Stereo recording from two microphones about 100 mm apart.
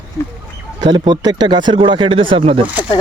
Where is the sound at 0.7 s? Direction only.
45° right (ahead or behind).